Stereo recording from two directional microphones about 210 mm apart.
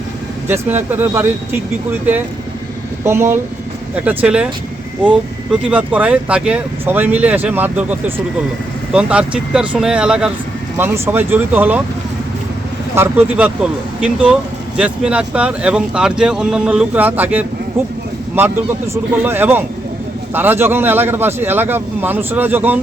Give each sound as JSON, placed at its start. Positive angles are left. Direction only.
{"t": 0.4, "sound": "speech", "side_deg": -10}
{"t": 3.0, "sound": "speech", "side_deg": -10}
{"t": 13.0, "sound": "speech", "side_deg": -5}
{"t": 19.1, "sound": "speech", "side_deg": -10}